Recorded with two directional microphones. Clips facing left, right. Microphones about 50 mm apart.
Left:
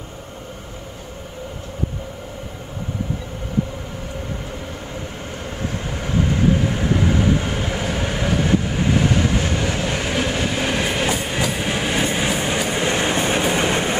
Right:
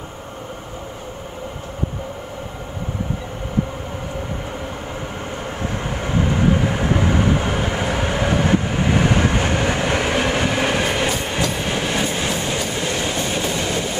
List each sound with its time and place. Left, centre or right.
5.9 s vehicle: centre
8.3 s train: right
10.6 s vehicle: centre
11.1 s train: centre; by 13.9 s left